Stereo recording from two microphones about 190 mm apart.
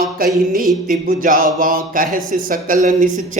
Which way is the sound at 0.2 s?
50° right (ahead or behind).